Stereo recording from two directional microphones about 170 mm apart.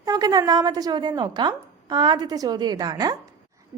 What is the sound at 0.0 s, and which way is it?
A woman's voice, 20° right (ahead or behind).